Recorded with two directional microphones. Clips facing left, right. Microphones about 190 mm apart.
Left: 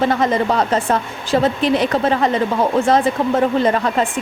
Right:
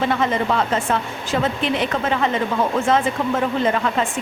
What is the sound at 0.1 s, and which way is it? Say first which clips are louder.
A woman's voice: left 3 dB; 40° left (ahead or behind).